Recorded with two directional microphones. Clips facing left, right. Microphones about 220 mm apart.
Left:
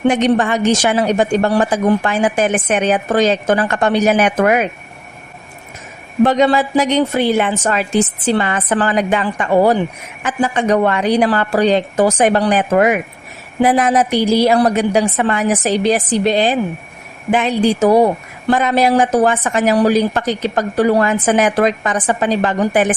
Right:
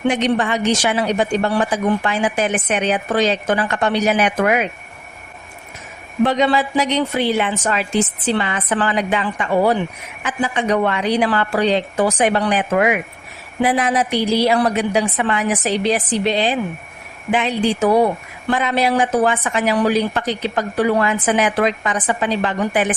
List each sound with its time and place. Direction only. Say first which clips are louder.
0.0 s a woman's voice: left 4 dB; 45° left (ahead or behind)
6.2 s a woman's voice: left 4 dB; 45° left (ahead or behind)